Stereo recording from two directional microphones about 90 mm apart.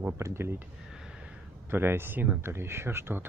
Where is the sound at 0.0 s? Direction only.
30° right (ahead or behind).